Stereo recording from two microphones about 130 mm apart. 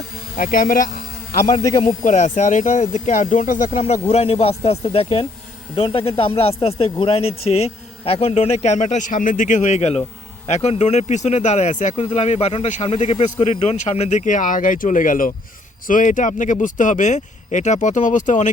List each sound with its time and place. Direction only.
0.3 s a man's voice: 90° left
2.0 s speech: 70° left (ahead or behind)
4.1 s a man's voice: 50° left (ahead or behind); by 18.5 s 70° left (ahead or behind)